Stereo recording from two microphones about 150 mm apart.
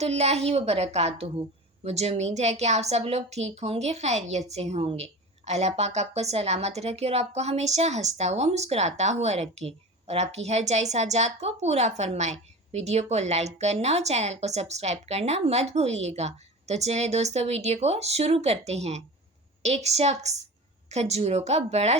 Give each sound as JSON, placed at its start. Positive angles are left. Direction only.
{"t": 0.0, "sound": "a woman's voice", "side_deg": -45}